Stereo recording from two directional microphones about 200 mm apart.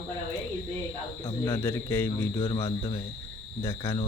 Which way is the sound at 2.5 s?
25° left (ahead or behind).